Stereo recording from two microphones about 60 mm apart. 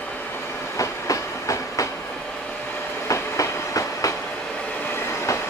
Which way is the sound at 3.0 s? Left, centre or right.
Left.